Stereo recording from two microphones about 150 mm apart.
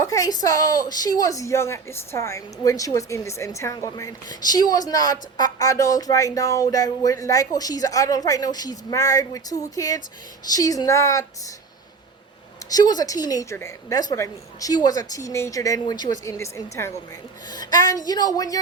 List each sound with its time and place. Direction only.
0.0 s a woman's voice: 20° left (ahead or behind)
12.7 s a woman's voice: 25° left (ahead or behind)